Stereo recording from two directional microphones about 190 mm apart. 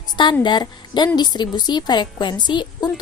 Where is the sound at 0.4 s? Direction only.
25° left (ahead or behind).